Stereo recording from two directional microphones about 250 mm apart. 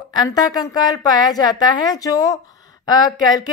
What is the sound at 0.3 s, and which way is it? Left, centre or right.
A woman's voice, centre.